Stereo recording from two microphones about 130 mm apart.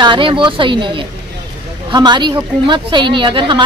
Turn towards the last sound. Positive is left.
turn(degrees=-40)  # may be behind; listen again after turning